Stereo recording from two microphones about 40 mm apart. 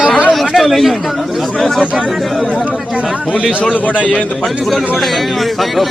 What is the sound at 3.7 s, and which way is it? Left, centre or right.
Speech, left.